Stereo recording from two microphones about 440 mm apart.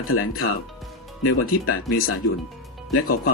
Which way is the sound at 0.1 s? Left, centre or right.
Left.